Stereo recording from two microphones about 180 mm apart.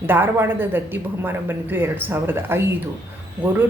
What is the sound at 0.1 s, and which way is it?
Speech, 10° right (ahead or behind).